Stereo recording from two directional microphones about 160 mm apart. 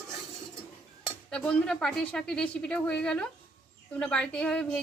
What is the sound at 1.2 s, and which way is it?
A woman's voice, 5° left (ahead or behind).